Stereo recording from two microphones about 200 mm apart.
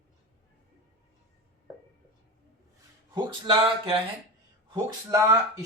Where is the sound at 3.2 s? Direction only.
25° right (ahead or behind).